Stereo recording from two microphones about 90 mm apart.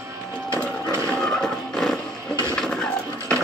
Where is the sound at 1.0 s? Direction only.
10° left (ahead or behind).